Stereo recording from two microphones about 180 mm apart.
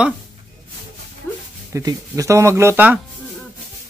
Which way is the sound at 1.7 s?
15° right (ahead or behind).